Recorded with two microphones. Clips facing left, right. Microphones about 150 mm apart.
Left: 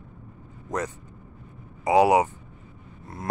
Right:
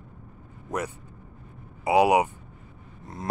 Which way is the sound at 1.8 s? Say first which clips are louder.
Left 1 dB; 15° right (ahead or behind).